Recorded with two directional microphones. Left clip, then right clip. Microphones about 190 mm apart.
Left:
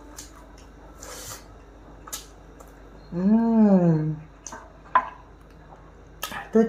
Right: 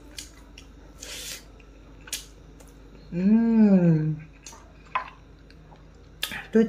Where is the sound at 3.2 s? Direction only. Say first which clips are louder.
Left 1 dB; 15° right (ahead or behind).